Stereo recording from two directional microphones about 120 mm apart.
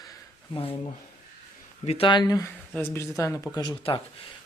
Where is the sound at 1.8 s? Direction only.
50° left (ahead or behind).